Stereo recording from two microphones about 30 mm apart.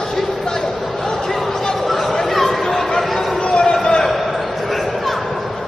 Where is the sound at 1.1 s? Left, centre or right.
Centre.